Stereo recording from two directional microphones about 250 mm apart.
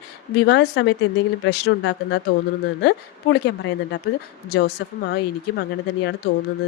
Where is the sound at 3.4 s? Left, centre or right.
Left.